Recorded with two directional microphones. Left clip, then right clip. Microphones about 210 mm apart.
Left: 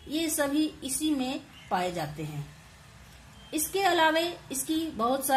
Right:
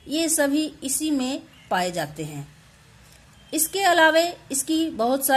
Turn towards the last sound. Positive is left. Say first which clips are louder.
# right 5 dB
turn(degrees=-40)  # may be behind; listen again after turning